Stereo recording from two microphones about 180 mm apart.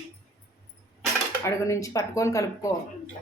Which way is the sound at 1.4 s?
15° left (ahead or behind).